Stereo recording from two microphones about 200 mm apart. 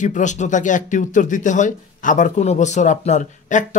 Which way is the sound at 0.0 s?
40° left (ahead or behind).